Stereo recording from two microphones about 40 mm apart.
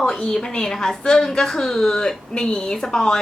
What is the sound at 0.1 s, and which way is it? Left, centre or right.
A woman's voice, centre.